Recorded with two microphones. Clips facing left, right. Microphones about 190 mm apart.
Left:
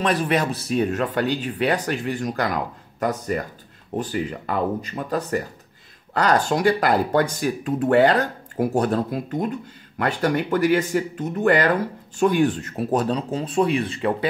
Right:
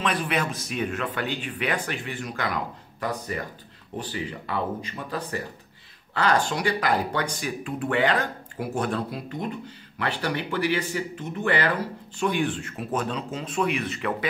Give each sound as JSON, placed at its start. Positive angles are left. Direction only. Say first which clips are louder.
{"t": 0.0, "sound": "speech", "louder": "left 5 dB", "side_deg": 40}